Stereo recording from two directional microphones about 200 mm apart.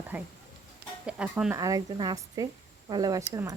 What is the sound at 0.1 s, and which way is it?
Speech, 5° right (ahead or behind).